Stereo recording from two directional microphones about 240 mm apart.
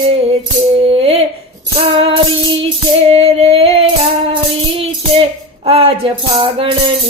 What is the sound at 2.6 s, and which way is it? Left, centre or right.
Music, right.